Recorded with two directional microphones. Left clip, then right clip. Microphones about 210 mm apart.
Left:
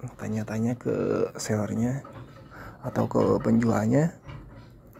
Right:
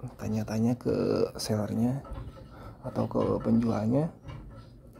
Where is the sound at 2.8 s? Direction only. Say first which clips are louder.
Left 5 dB; 15° left (ahead or behind).